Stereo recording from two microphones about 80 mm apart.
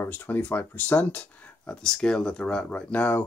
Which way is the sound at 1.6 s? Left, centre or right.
Centre.